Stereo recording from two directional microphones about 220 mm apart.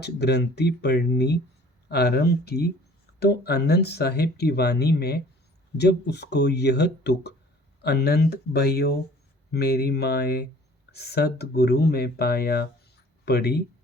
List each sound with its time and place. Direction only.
0.0 s speech: 50° left (ahead or behind)